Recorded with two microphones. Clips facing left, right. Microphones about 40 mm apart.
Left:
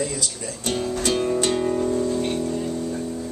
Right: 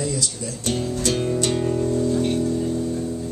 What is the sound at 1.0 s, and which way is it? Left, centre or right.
Music, centre.